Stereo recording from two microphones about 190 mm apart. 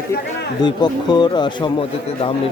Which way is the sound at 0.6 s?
20° left (ahead or behind).